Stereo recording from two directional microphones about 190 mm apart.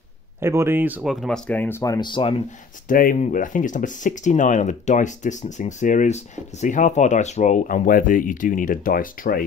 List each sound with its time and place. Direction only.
0.4 s speech: 15° right (ahead or behind); by 2.3 s 25° left (ahead or behind)
2.9 s speech: 45° left (ahead or behind)